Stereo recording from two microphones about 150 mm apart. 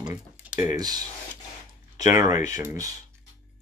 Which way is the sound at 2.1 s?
20° right (ahead or behind).